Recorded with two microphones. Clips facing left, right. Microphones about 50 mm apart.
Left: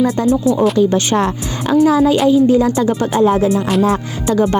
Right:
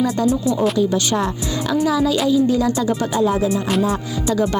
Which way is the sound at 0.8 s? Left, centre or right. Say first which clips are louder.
Left 5 dB; left.